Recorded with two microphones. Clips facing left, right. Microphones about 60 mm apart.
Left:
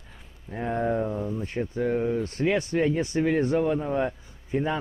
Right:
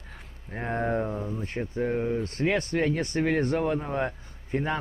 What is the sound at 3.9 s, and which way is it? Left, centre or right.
Speech, right.